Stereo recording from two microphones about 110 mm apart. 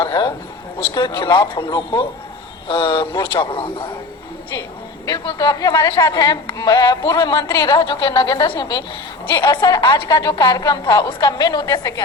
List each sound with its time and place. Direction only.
0.0 s a sound: 40° left (ahead or behind)
0.8 s a man's voice: 45° left (ahead or behind)
5.0 s a woman's voice: 40° left (ahead or behind)